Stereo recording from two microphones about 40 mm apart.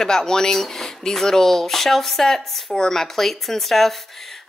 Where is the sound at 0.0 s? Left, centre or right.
Centre.